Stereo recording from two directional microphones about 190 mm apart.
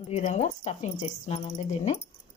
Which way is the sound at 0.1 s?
35° left (ahead or behind).